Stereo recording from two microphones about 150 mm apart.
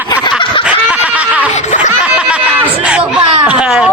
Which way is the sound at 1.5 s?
50° left (ahead or behind).